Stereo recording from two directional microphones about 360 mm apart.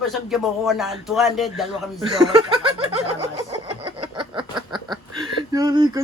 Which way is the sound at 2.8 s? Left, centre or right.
Centre.